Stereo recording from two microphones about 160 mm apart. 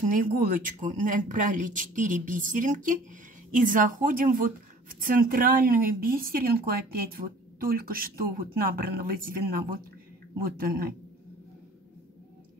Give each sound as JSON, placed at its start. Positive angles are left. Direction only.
{"t": 0.1, "sound": "a woman's voice", "side_deg": -60}